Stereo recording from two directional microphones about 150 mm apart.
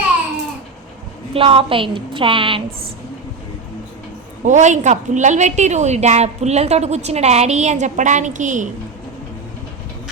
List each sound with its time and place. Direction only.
1.3 s a woman's voice: 40° right (ahead or behind)
4.4 s a woman's voice: 55° right (ahead or behind)